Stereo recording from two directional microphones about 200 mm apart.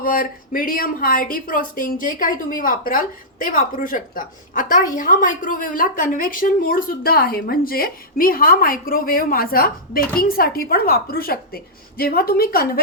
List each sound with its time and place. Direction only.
0.0 s speech: 45° left (ahead or behind)